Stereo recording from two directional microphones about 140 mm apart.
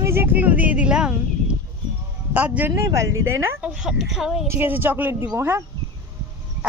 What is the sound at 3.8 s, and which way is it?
Speech, 5° right (ahead or behind).